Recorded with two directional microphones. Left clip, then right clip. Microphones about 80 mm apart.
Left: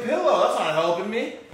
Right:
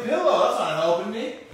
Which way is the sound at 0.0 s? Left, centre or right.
Centre.